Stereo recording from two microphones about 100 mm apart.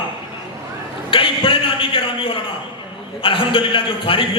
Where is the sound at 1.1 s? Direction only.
60° left (ahead or behind).